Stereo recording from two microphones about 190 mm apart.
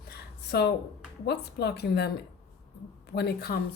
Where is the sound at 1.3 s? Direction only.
60° left (ahead or behind).